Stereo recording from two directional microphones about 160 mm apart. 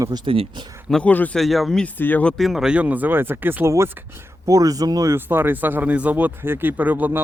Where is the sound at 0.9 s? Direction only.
10° left (ahead or behind).